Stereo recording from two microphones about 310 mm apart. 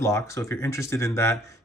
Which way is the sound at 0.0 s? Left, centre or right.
Centre.